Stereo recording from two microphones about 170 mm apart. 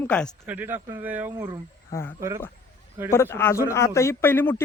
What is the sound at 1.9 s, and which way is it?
A man's voice, 15° left (ahead or behind).